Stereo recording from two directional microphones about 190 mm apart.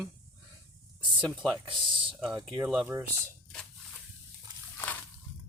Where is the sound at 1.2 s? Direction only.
Centre (ahead or behind).